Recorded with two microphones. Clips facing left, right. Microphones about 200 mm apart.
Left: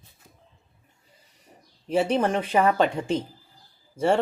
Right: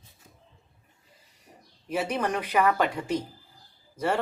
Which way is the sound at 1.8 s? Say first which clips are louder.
Left 6 dB; 30° left (ahead or behind).